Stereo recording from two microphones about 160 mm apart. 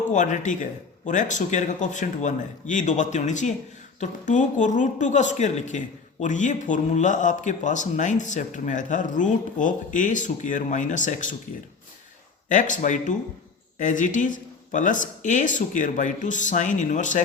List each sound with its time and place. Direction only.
0.1 s speech: 50° left (ahead or behind)
12.5 s speech: 50° left (ahead or behind)